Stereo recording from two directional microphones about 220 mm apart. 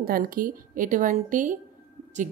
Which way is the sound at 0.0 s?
40° right (ahead or behind).